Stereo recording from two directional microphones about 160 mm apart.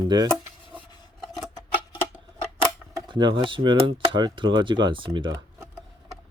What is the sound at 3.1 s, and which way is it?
Speech, 30° right (ahead or behind).